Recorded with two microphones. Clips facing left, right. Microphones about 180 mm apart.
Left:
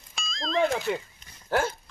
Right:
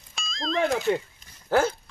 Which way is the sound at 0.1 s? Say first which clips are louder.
Even; centre (ahead or behind).